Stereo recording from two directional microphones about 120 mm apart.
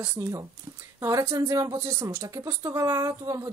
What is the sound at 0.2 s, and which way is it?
Speech, 25° right (ahead or behind).